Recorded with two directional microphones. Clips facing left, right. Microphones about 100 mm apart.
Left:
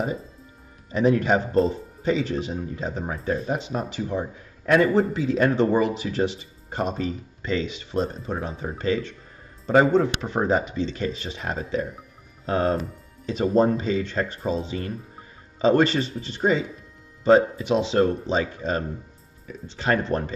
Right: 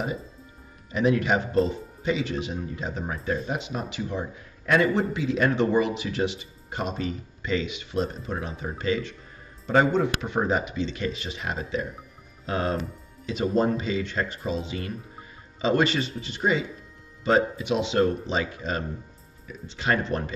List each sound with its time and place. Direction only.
0.9 s a man's voice: 40° left (ahead or behind)
20.1 s a man's voice: 35° left (ahead or behind)